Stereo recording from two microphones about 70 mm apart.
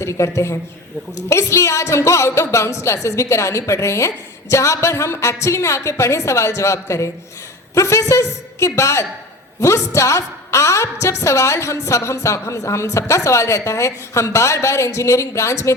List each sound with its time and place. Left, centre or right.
0.0 s a woman's voice: left